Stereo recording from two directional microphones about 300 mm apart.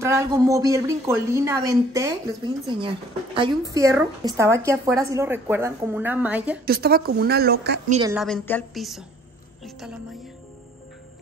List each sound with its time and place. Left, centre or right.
0.0 s a woman's voice: centre
6.6 s speech: right
8.0 s a woman's voice: centre